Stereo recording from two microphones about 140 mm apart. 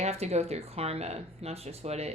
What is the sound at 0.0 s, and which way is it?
Speech, 50° right (ahead or behind).